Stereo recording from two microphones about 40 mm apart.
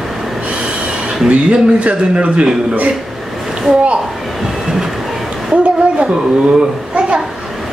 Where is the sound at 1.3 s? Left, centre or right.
Right.